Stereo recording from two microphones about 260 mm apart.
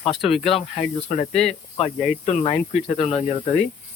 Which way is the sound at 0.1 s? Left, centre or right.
Centre.